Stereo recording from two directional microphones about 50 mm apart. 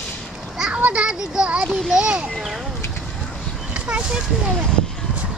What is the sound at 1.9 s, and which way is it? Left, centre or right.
Speech, centre.